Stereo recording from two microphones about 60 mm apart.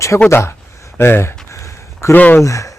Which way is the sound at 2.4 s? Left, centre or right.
Left.